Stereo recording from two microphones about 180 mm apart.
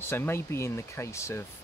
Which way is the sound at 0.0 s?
15° left (ahead or behind).